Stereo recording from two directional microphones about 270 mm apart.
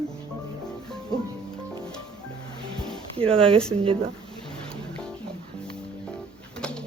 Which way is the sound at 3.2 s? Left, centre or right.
Centre.